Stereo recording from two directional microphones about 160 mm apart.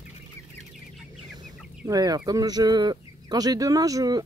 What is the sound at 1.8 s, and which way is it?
Speech, 25° right (ahead or behind).